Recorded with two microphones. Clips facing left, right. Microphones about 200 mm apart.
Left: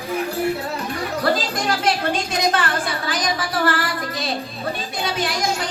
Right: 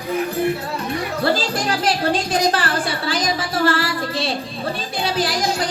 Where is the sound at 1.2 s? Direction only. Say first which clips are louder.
Right 1 dB; 30° right (ahead or behind).